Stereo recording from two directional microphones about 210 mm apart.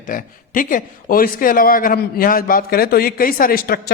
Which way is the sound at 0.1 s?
40° left (ahead or behind).